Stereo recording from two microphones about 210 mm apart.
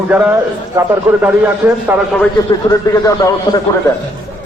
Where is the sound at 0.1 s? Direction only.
10° right (ahead or behind).